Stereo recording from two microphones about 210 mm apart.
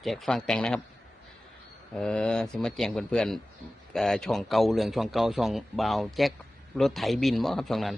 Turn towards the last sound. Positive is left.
turn(degrees=0)  # may be behind; listen again after turning